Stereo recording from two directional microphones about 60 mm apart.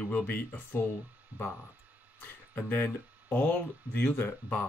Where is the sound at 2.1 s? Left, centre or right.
Left.